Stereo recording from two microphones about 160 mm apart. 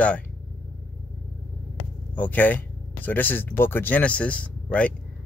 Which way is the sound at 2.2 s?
10° left (ahead or behind).